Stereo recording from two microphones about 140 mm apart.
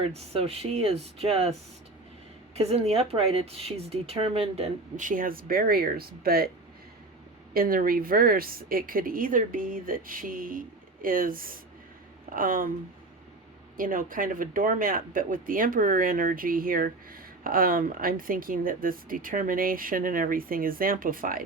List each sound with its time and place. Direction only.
0.0 s speech: 45° right (ahead or behind)
2.6 s speech: 50° right (ahead or behind)
4.9 s a woman's voice: 75° right (ahead or behind); by 6.5 s 90° right
7.5 s a woman's voice: 90° right
13.7 s speech: 80° right